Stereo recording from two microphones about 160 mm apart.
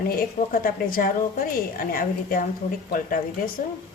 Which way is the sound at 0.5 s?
65° left (ahead or behind).